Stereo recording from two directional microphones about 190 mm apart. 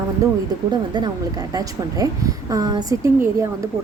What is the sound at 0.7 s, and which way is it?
A woman's voice, 20° right (ahead or behind).